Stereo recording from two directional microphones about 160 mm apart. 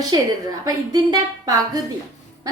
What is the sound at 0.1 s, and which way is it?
A woman's voice, 25° right (ahead or behind).